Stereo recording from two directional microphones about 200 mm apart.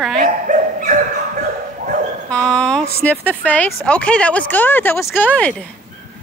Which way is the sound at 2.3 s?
5° left (ahead or behind).